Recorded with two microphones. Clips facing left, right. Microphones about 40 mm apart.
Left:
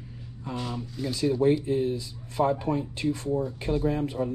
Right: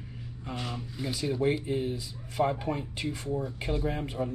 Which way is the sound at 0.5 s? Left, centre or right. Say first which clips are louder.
Left 4 dB; centre.